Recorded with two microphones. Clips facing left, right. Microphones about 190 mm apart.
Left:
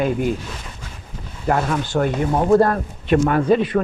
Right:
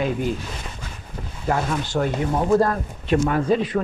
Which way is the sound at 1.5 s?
55° left (ahead or behind).